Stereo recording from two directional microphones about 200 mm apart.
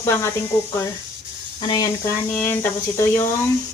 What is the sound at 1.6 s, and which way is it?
Speech, 25° left (ahead or behind).